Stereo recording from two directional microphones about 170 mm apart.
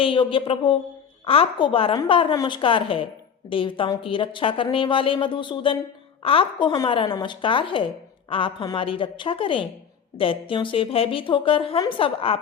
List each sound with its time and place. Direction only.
0.0 s a woman's voice: 30° left (ahead or behind)